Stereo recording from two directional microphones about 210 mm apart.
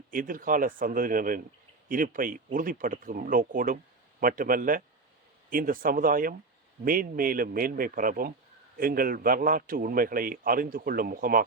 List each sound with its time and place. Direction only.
0.1 s a man's voice: 40° right (ahead or behind)